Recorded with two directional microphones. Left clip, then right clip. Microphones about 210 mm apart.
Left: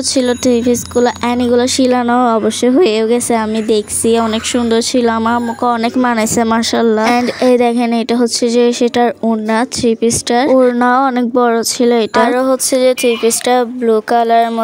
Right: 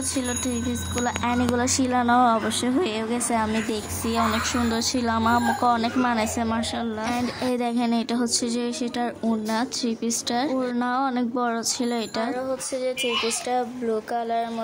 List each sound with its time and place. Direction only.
0.1 s speech: 35° left (ahead or behind)